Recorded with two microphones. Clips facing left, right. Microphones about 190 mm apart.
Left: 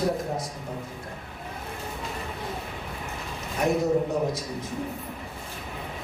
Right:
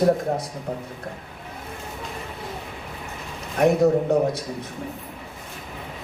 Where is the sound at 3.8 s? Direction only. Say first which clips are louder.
Right 5 dB; 60° right (ahead or behind).